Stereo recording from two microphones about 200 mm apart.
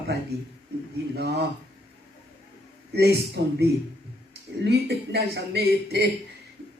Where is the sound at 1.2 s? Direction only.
55° right (ahead or behind).